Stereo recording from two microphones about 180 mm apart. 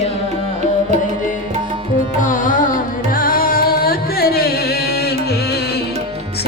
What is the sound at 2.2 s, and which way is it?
Music, 45° left (ahead or behind).